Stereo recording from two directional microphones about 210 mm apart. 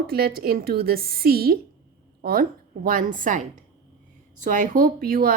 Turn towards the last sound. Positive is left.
turn(degrees=-45)  # may be behind; listen again after turning